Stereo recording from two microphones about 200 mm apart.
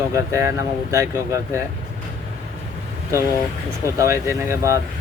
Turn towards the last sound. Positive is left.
turn(degrees=-15)  # may be behind; listen again after turning